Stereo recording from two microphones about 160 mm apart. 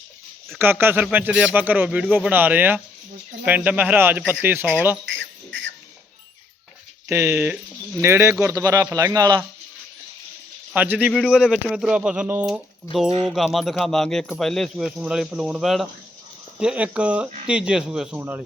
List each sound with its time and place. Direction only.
0.6 s a man's voice: 15° right (ahead or behind)
7.1 s a man's voice: 15° right (ahead or behind)
10.8 s a man's voice: 10° right (ahead or behind)